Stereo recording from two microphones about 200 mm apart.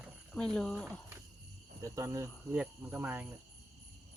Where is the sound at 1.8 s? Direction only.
15° right (ahead or behind).